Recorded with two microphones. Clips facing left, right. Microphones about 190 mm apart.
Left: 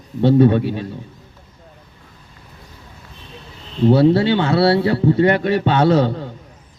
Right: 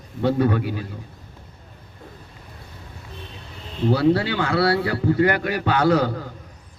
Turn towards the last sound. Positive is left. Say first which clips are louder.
# left 4 dB
turn(degrees=25)  # may be behind; listen again after turning